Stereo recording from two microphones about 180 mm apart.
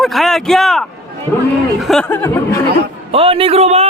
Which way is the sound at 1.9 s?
5° left (ahead or behind).